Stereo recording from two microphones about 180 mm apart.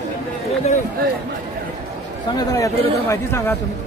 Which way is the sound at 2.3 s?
20° left (ahead or behind).